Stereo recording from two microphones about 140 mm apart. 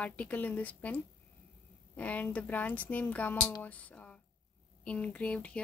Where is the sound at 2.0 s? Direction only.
10° left (ahead or behind).